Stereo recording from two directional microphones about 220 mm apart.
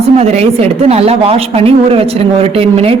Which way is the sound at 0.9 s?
30° right (ahead or behind).